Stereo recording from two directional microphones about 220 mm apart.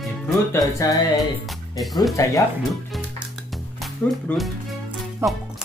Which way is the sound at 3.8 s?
Centre (ahead or behind).